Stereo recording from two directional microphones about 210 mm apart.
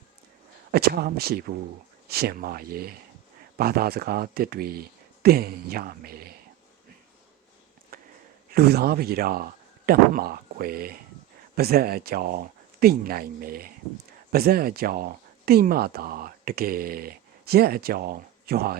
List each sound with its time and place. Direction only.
0.7 s speech: 45° right (ahead or behind)
7.9 s a sound: 45° right (ahead or behind)
8.5 s speech: 45° right (ahead or behind)